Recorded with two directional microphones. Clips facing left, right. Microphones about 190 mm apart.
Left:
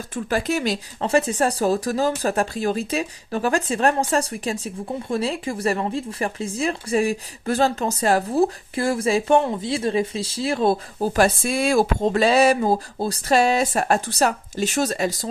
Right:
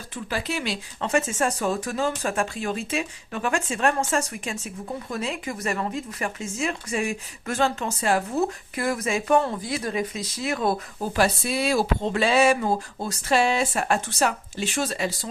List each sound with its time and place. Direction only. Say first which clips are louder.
0.1 s speech: left 6 dB; 45° left (ahead or behind); by 11.1 s 30° left (ahead or behind)
11.1 s speech: left 3 dB; 50° left (ahead or behind)